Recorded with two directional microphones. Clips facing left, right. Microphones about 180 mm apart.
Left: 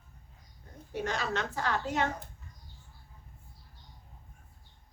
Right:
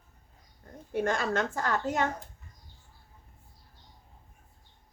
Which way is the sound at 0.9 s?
50° right (ahead or behind).